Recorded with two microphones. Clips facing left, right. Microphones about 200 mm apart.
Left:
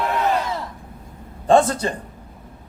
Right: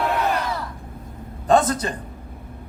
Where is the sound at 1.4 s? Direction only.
30° left (ahead or behind).